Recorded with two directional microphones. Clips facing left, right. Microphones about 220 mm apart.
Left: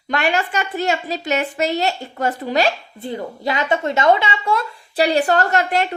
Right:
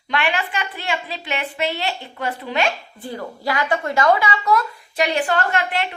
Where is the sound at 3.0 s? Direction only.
20° left (ahead or behind).